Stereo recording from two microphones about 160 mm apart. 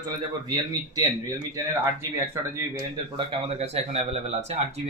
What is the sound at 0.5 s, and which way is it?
Speech, 25° right (ahead or behind).